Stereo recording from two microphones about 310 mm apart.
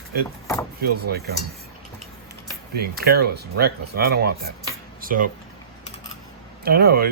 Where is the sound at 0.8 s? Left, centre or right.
Right.